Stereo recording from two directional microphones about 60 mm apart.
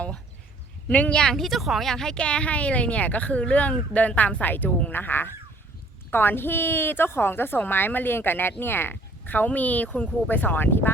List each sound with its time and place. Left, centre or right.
0.9 s speech: left
1.2 s a woman's voice: centre; by 10.9 s left